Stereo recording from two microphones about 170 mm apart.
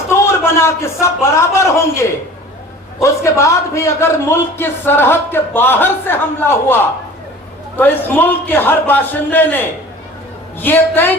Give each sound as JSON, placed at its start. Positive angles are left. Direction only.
{"t": 0.1, "sound": "a man's voice", "side_deg": 15}